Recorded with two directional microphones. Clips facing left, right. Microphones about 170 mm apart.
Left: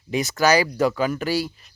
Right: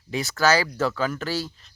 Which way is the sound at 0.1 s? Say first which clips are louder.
Left 3 dB; 15° left (ahead or behind).